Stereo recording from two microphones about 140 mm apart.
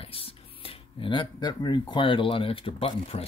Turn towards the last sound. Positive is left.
turn(degrees=40)  # may be behind; listen again after turning